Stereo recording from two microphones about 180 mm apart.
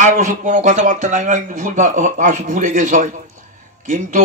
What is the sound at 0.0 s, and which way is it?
Speech, 45° right (ahead or behind).